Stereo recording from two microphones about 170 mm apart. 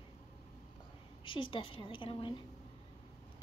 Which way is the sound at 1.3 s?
30° left (ahead or behind).